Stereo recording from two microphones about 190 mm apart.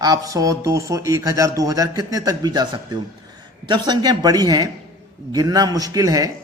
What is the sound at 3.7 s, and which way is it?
Speech, 20° right (ahead or behind).